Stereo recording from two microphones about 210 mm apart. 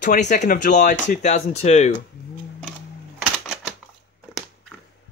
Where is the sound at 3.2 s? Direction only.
Centre (ahead or behind).